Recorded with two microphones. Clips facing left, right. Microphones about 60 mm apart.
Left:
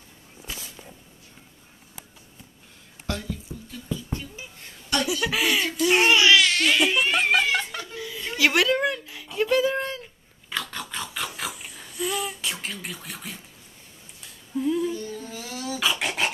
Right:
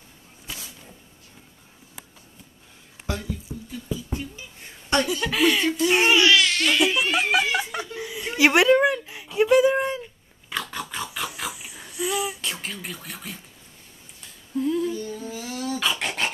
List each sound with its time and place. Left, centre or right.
3.1 s a sound: centre
3.9 s music: centre
5.0 s speech: centre
7.7 s chuckle: centre
8.7 s a sound: centre
14.2 s cough: centre